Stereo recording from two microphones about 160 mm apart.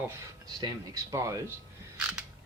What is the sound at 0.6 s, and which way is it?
Speech, 20° right (ahead or behind).